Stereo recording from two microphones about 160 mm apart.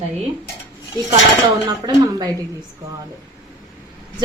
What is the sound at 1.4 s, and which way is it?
Speech, 25° right (ahead or behind).